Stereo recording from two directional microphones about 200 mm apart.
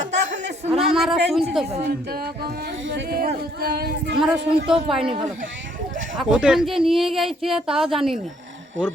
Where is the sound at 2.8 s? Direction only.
65° right (ahead or behind).